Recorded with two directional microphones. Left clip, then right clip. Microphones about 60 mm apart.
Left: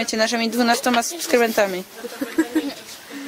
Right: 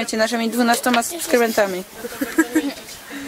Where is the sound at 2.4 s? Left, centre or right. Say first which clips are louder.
Right 3 dB; right.